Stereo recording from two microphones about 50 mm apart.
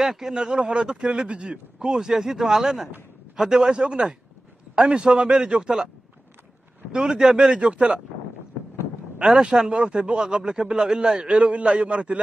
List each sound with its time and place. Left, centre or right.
0.0 s a man's voice: centre
6.9 s a man's voice: centre
9.2 s a man's voice: centre